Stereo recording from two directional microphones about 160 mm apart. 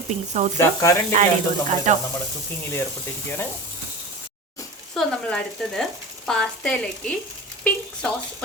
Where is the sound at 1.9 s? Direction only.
50° right (ahead or behind).